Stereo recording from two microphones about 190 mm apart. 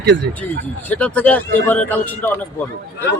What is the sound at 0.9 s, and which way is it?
A man's voice, 10° left (ahead or behind).